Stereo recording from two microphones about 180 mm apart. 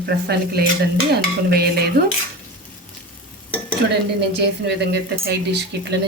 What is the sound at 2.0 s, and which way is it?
Speech, 55° right (ahead or behind).